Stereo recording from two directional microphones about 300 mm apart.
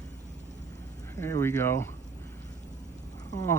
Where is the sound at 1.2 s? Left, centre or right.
Centre.